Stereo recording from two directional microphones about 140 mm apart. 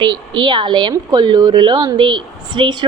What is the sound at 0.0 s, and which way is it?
A woman's voice, 35° right (ahead or behind).